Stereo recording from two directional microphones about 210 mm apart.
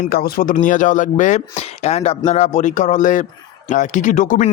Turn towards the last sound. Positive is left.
turn(degrees=40)  # may be behind; listen again after turning